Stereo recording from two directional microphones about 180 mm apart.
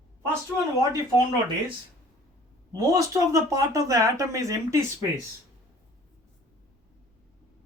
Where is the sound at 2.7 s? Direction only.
20° right (ahead or behind).